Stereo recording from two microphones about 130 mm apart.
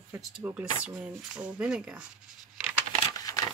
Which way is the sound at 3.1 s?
25° left (ahead or behind).